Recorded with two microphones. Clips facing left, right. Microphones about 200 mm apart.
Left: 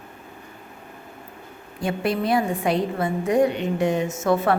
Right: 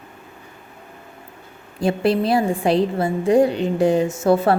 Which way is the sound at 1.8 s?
30° right (ahead or behind).